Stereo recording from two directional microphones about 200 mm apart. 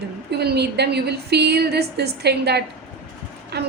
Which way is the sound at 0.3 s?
55° right (ahead or behind).